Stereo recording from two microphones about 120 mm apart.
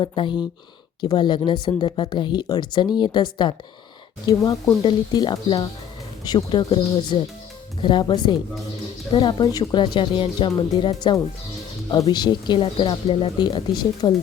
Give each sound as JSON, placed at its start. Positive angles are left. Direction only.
{"t": 0.0, "sound": "speech", "side_deg": 45}
{"t": 4.3, "sound": "speech", "side_deg": 30}
{"t": 14.0, "sound": "speech", "side_deg": 30}